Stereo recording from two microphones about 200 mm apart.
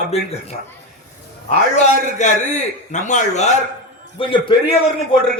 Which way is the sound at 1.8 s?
35° left (ahead or behind).